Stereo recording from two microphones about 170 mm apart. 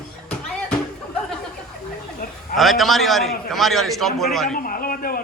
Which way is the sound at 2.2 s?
55° left (ahead or behind).